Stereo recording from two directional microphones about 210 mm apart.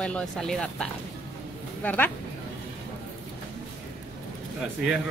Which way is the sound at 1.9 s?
10° left (ahead or behind).